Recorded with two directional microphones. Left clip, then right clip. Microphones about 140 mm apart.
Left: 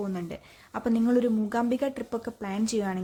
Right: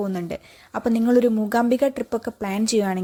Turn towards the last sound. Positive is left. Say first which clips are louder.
# right 7 dB
turn(degrees=-40)  # may be behind; listen again after turning